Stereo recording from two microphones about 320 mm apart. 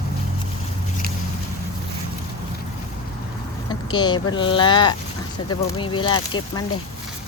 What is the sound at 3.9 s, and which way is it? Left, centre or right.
Speech, centre.